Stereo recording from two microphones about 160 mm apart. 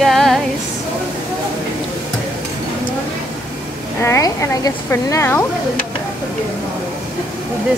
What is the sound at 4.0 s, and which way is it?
A woman's voice, 20° left (ahead or behind).